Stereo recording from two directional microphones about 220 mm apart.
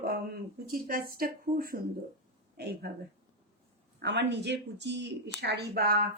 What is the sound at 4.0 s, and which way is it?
Speech, 50° right (ahead or behind).